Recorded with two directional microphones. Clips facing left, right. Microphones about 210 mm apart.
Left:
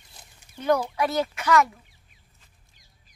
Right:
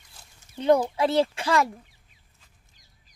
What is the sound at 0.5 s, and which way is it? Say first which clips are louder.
Speech: right 3 dB; 25° right (ahead or behind).